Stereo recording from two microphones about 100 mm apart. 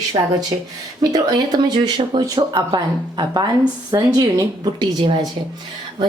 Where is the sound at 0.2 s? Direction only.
45° right (ahead or behind).